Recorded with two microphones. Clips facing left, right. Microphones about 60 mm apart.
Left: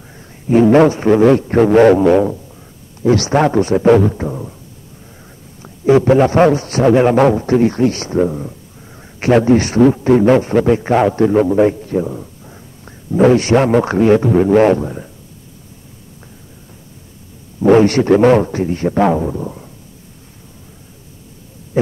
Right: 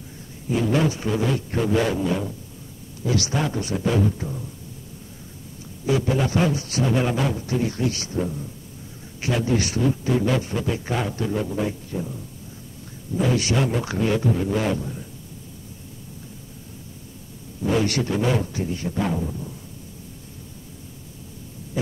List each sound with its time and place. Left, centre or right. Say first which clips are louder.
0.5 s a man's voice: left 13 dB; left
5.6 s a man's voice: left 12 dB; left
9.8 s a man's voice: left 12 dB; left
17.6 s a man's voice: left 12 dB; left
18.1 s a man's voice: left 13 dB; left